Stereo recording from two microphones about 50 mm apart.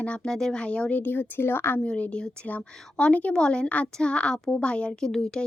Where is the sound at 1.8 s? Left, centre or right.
Left.